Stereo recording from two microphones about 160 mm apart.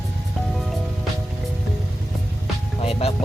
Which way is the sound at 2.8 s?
40° left (ahead or behind).